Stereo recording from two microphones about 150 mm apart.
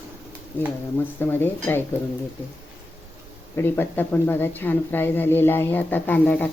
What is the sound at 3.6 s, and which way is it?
Speech, 15° left (ahead or behind).